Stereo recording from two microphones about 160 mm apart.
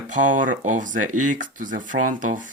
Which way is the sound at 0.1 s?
50° right (ahead or behind).